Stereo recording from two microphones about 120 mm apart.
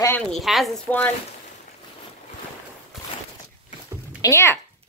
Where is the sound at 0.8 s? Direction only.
15° left (ahead or behind).